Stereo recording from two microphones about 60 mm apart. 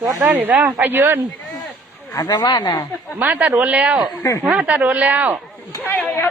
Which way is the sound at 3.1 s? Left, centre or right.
Right.